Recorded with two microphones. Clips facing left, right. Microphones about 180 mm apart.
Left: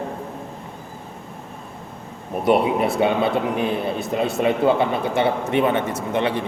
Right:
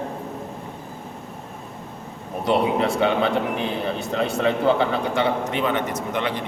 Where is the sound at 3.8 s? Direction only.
10° left (ahead or behind).